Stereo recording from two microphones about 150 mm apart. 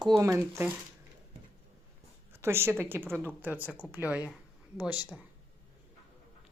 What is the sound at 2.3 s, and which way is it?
Speech, 15° right (ahead or behind).